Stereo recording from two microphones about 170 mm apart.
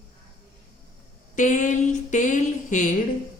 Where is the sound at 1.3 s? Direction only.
45° left (ahead or behind).